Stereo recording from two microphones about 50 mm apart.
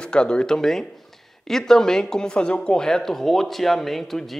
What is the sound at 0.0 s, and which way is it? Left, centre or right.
Speech, centre.